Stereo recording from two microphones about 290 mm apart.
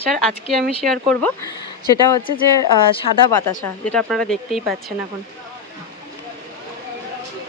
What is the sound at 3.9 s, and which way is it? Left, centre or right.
Speech, centre.